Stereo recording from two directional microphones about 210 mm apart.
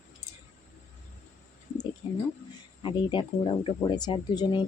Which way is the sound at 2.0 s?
25° left (ahead or behind).